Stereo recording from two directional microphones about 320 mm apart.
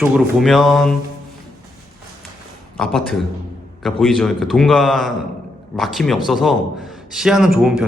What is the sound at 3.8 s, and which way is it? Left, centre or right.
A man's voice, centre.